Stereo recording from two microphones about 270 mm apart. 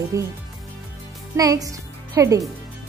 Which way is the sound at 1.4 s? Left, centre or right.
Centre.